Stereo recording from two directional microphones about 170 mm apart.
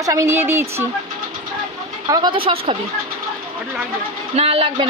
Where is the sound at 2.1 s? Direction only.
25° right (ahead or behind).